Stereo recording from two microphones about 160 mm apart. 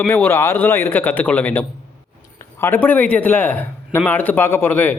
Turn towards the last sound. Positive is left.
turn(degrees=10)  # may be behind; listen again after turning